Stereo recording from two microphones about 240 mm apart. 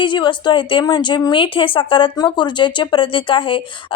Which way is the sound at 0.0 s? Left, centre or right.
Centre.